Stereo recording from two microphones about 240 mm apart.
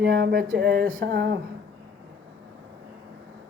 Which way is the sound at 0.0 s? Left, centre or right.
Right.